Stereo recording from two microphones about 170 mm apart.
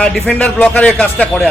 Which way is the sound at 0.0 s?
10° left (ahead or behind).